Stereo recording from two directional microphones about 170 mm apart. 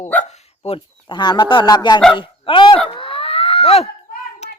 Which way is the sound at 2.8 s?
30° left (ahead or behind).